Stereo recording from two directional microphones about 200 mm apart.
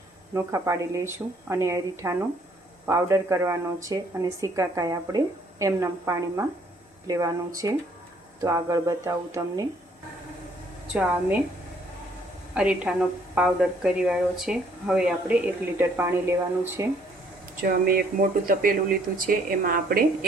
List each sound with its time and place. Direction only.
0.3 s speech: 15° right (ahead or behind)
10.9 s speech: 5° right (ahead or behind)
12.5 s a woman's voice: 5° right (ahead or behind)
17.6 s a woman's voice: 50° right (ahead or behind)